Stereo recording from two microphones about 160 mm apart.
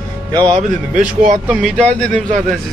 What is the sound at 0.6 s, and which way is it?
Speech, 50° right (ahead or behind).